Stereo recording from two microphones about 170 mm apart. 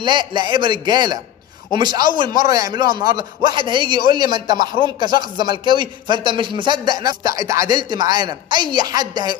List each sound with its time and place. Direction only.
0.0 s a man's voice: 25° right (ahead or behind)